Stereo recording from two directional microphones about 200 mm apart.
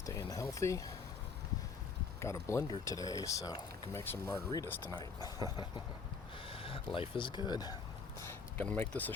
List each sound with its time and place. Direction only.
0.0 s speech: 15° left (ahead or behind)
2.2 s speech: 15° left (ahead or behind)
8.5 s speech: 10° left (ahead or behind)